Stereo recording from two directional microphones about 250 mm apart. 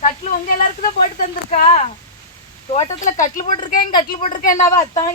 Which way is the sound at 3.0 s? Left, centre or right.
Left.